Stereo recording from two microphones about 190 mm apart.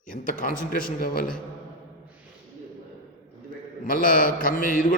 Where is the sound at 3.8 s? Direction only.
45° left (ahead or behind).